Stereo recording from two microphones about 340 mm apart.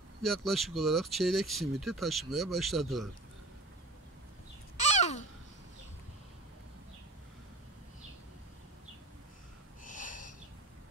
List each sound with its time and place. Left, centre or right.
0.2 s speech: centre
4.7 s babbling: centre
9.8 s snort: left